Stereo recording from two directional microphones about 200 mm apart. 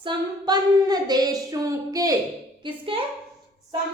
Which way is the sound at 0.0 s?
20° right (ahead or behind).